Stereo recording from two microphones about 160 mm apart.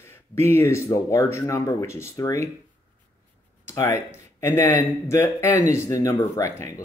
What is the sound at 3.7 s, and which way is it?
Speech, 15° left (ahead or behind).